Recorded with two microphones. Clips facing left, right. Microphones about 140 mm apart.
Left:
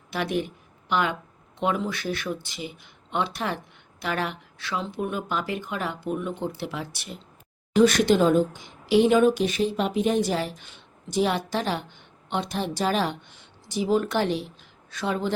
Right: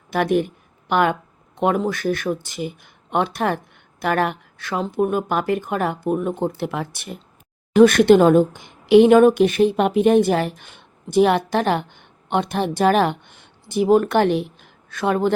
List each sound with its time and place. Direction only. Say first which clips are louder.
0.1 s a woman's voice: right 8 dB; 50° right (ahead or behind)